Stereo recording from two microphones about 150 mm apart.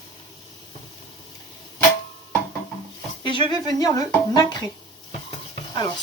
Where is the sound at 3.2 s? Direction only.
30° left (ahead or behind).